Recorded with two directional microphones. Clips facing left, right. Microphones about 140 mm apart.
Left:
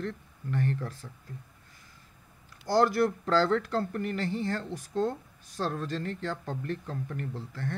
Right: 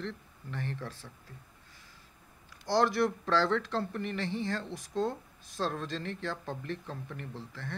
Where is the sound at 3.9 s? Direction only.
45° left (ahead or behind).